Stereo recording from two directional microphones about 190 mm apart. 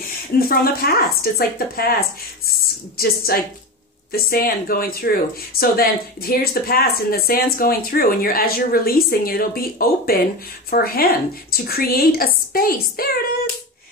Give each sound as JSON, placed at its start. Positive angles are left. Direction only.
{"t": 0.4, "sound": "speech", "side_deg": 50}